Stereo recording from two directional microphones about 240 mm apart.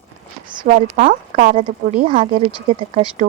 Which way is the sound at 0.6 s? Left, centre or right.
Right.